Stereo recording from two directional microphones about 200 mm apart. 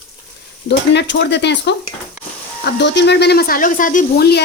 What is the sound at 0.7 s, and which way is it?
A woman's voice, 60° left (ahead or behind).